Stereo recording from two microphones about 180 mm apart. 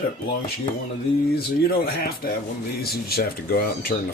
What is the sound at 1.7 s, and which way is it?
Speech, 55° left (ahead or behind).